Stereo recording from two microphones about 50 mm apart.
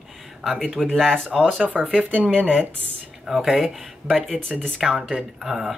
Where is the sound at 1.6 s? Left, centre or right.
Centre.